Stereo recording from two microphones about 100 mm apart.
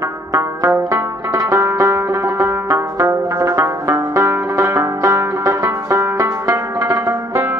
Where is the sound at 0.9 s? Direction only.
30° right (ahead or behind).